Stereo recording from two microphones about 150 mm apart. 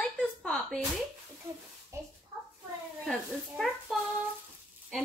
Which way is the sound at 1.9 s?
20° right (ahead or behind).